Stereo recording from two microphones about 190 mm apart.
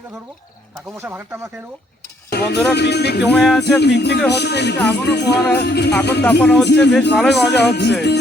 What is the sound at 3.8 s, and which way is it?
Speech, 60° left (ahead or behind).